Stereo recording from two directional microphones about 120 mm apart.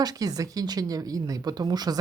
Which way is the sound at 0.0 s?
30° right (ahead or behind).